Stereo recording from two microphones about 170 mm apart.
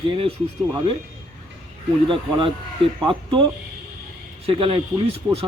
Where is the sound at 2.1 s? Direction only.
30° right (ahead or behind).